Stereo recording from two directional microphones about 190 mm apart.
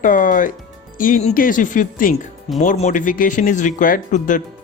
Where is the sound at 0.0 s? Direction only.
45° left (ahead or behind).